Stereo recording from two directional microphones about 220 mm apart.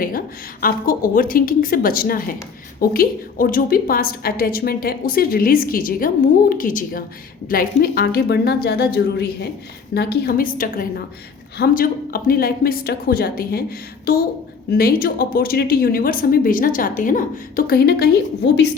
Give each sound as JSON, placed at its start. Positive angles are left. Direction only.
{"t": 0.6, "sound": "a woman's voice", "side_deg": 40}